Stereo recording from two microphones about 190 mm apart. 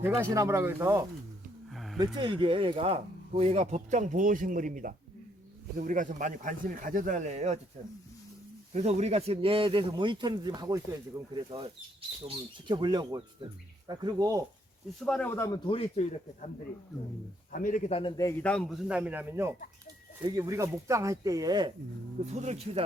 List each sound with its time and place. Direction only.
0.0 s speech: 15° right (ahead or behind)
1.7 s a sound: centre (ahead or behind)
2.1 s a man's voice: 25° right (ahead or behind)
8.7 s speech: 35° right (ahead or behind); by 14.4 s 20° right (ahead or behind)
15.0 s a man's voice: 5° left (ahead or behind)
15.4 s speech: 15° left (ahead or behind)
15.6 s speech: 30° left (ahead or behind)
17.5 s speech: 45° left (ahead or behind)
18.2 s a man's voice: 10° left (ahead or behind); by 21.7 s 20° right (ahead or behind)
22.3 s speech: 35° right (ahead or behind)